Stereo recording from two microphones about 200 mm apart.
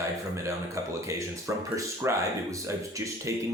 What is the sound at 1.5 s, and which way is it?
Speech, 15° right (ahead or behind).